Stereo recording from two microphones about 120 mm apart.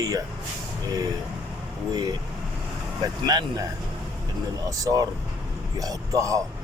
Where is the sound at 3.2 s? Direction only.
35° right (ahead or behind).